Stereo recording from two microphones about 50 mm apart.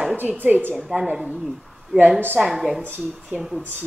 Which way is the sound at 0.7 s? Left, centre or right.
Centre.